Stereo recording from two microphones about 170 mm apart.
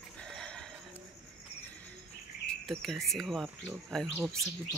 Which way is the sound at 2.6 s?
Centre (ahead or behind).